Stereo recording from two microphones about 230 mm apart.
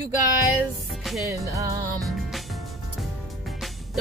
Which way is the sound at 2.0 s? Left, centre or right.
Centre.